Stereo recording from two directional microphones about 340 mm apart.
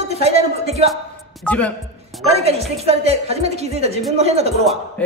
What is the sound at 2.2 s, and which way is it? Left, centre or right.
A woman's voice, centre.